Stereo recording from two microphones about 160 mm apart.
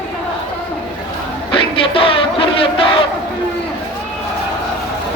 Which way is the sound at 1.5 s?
35° left (ahead or behind).